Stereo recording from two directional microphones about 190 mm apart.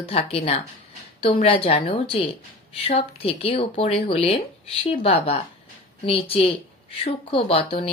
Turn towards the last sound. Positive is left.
turn(degrees=30)  # may be behind; listen again after turning